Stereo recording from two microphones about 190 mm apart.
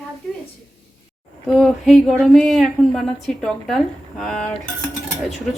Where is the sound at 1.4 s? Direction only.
Centre (ahead or behind).